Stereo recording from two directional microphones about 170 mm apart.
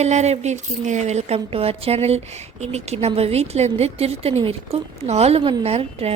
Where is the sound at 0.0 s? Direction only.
40° right (ahead or behind).